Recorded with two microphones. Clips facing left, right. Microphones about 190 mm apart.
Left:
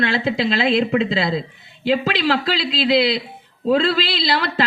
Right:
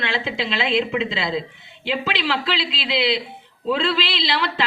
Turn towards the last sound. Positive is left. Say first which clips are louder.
# left 3 dB
turn(degrees=40)  # may be behind; listen again after turning